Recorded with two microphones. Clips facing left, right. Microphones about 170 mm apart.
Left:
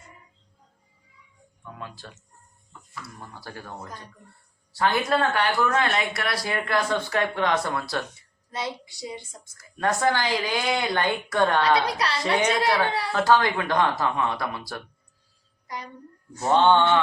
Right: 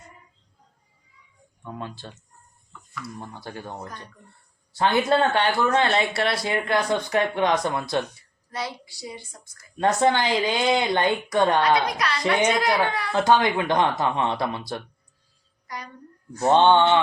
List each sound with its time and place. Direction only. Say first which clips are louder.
1.6 s speech: right 5 dB; 30° right (ahead or behind)
2.7 s chicken: even; 35° left (ahead or behind)
3.2 s speech: right 4 dB; 20° right (ahead or behind)
8.5 s a woman's voice: even; 20° left (ahead or behind)
9.6 s speech: right 4 dB; 25° right (ahead or behind)
11.9 s a woman's voice: right 1 dB; 30° left (ahead or behind)
13.1 s speech: right 2 dB; 20° right (ahead or behind)
15.6 s a child's voice: even; 25° left (ahead or behind)
16.4 s speech: right 2 dB; 20° right (ahead or behind)